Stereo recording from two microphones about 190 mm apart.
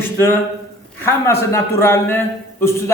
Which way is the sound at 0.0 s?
10° left (ahead or behind).